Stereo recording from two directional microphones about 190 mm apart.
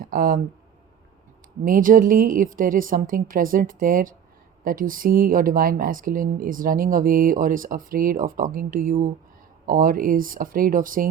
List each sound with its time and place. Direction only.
0.0 s speech: 50° right (ahead or behind)
1.6 s speech: 45° right (ahead or behind)